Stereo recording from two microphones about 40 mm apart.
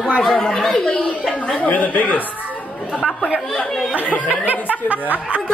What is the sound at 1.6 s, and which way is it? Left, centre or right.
Speech, left.